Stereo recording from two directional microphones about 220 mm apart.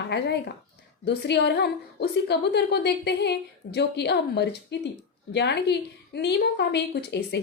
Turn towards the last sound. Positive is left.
turn(degrees=50)  # may be behind; listen again after turning